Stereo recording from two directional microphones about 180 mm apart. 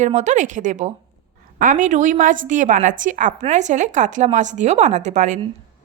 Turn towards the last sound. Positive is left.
turn(degrees=-40)  # may be behind; listen again after turning